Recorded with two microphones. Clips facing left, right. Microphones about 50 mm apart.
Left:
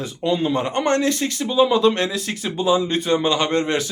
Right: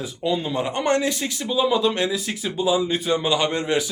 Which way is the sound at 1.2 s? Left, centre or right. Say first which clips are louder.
Left 4 dB; centre.